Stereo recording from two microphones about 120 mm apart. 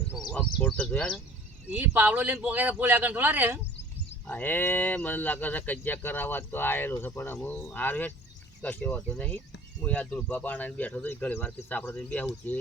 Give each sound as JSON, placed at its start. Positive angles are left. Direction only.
{"t": 0.2, "sound": "speech", "side_deg": 5}
{"t": 1.7, "sound": "speech", "side_deg": -15}
{"t": 4.3, "sound": "speech", "side_deg": 15}